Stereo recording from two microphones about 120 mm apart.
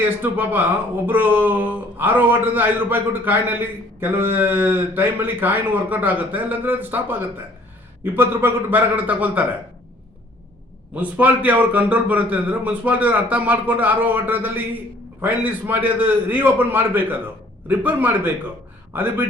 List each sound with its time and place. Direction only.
0.0 s a man's voice: 15° right (ahead or behind)
10.9 s a man's voice: 15° right (ahead or behind)